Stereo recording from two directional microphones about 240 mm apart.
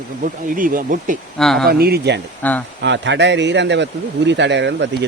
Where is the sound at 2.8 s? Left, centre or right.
Right.